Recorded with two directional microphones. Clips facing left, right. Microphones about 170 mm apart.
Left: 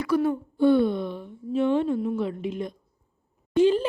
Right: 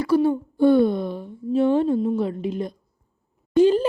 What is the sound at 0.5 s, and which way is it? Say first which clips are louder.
Speech: right 3 dB; 40° right (ahead or behind).